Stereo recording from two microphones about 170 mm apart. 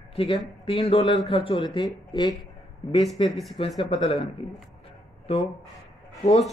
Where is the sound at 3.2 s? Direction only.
30° left (ahead or behind).